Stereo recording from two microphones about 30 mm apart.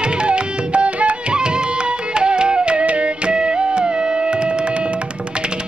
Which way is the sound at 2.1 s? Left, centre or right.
Right.